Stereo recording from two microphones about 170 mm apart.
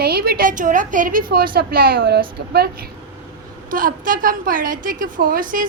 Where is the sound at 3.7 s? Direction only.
55° right (ahead or behind).